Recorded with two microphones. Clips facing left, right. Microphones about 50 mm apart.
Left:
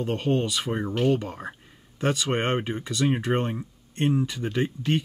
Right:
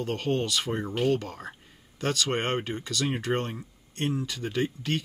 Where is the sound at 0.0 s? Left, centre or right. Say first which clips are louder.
Left 3 dB; centre.